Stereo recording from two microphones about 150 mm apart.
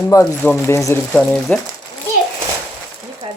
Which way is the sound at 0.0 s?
20° left (ahead or behind).